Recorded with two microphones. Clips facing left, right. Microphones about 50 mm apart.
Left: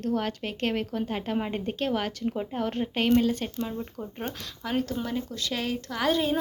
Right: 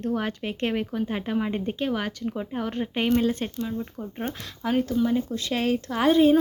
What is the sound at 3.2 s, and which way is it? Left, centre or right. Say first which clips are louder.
Speech: right 2 dB; right.